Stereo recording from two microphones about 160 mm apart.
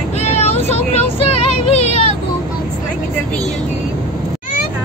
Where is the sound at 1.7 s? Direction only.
40° left (ahead or behind).